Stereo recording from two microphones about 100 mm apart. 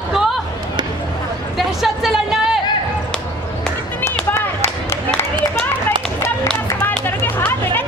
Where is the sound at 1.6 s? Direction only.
5° right (ahead or behind).